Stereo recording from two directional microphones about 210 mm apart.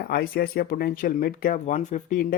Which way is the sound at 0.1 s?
45° left (ahead or behind).